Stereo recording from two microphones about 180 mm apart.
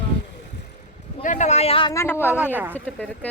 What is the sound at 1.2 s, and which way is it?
Speech, 45° left (ahead or behind).